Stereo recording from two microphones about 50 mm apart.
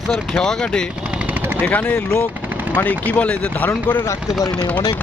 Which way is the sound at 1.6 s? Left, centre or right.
Left.